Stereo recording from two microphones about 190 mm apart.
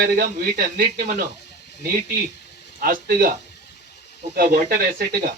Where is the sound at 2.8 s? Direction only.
50° right (ahead or behind).